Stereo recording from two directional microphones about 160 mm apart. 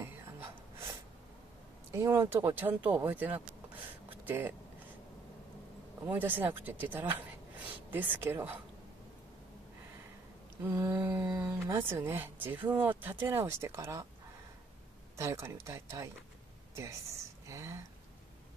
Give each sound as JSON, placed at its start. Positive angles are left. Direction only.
{"t": 0.0, "sound": "a sound", "side_deg": -15}
{"t": 1.9, "sound": "speech", "side_deg": -15}
{"t": 6.0, "sound": "speech", "side_deg": -10}
{"t": 10.6, "sound": "speech", "side_deg": -15}
{"t": 15.1, "sound": "speech", "side_deg": -15}
{"t": 17.5, "sound": "speech", "side_deg": -15}